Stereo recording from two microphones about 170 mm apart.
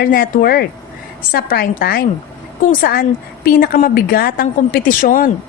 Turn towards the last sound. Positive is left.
turn(degrees=55)  # may be behind; listen again after turning